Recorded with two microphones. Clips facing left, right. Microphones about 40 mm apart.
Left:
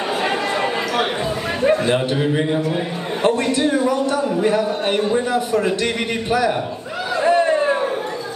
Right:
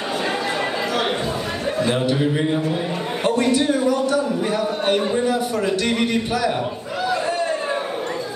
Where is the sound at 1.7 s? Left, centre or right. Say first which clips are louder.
Left 2 dB; left.